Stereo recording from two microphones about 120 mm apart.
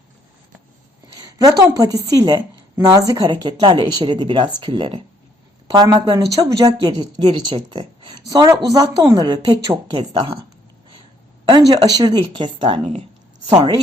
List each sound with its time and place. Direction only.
1.4 s a woman's voice: 30° right (ahead or behind)
11.7 s a woman's voice: 35° right (ahead or behind)